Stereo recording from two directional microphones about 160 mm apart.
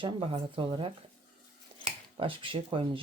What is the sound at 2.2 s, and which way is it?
Speech, 35° right (ahead or behind).